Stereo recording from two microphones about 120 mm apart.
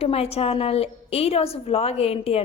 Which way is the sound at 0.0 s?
55° left (ahead or behind).